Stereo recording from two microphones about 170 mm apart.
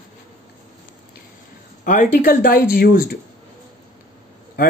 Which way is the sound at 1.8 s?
45° left (ahead or behind).